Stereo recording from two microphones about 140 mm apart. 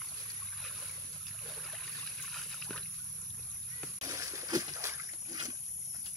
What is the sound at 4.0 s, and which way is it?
Boat, 25° right (ahead or behind).